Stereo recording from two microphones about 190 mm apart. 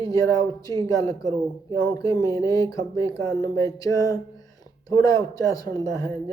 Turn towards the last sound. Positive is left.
turn(degrees=20)  # may be behind; listen again after turning